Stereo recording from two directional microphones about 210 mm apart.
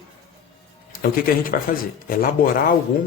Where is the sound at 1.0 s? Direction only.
40° left (ahead or behind).